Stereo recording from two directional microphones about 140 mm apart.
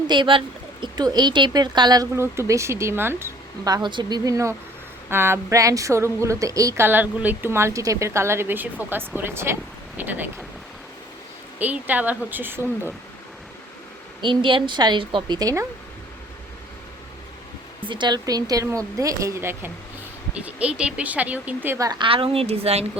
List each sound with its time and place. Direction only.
0.1 s a woman's voice: 35° right (ahead or behind); by 10.2 s 15° right (ahead or behind)
11.6 s a woman's voice: 10° right (ahead or behind)
14.2 s a woman's voice: 35° right (ahead or behind)
17.8 s a woman's voice: 35° right (ahead or behind); by 21.8 s 15° right (ahead or behind)
21.8 s a woman's voice: 35° right (ahead or behind)